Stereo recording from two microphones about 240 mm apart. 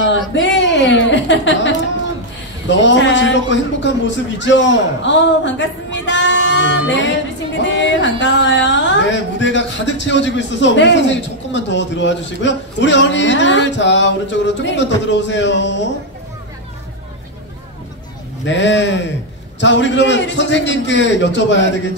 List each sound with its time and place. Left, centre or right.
0.1 s a sound: left
2.8 s a man's voice: left
18.4 s a man's voice: left